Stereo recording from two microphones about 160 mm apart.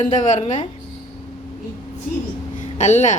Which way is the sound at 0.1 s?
50° left (ahead or behind).